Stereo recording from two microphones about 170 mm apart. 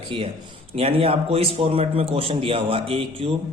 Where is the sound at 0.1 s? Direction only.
30° right (ahead or behind).